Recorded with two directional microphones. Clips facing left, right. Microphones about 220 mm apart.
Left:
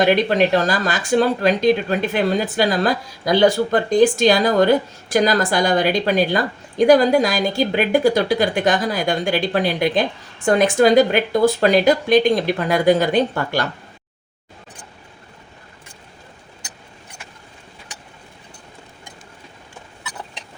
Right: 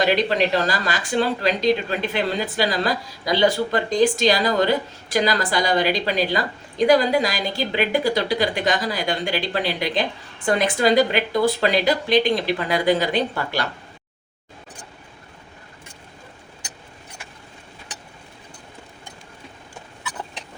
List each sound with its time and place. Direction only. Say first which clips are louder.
0.0 s speech: left 4 dB; 50° left (ahead or behind)